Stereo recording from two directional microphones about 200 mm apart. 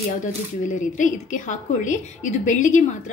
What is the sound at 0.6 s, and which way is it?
A woman's voice, 40° left (ahead or behind).